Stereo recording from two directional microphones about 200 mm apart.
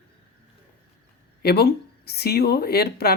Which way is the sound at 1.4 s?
55° left (ahead or behind).